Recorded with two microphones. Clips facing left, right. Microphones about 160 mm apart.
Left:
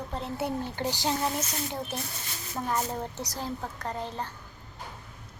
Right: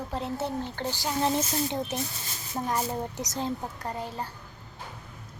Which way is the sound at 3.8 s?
10° right (ahead or behind).